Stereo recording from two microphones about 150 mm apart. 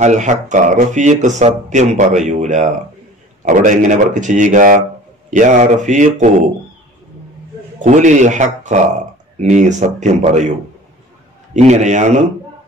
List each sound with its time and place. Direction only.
0.0 s speech: 55° right (ahead or behind)
7.8 s speech: 55° right (ahead or behind)
11.5 s speech: 50° right (ahead or behind)